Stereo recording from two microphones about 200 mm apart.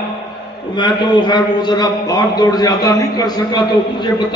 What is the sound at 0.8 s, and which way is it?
A man's voice, 20° left (ahead or behind).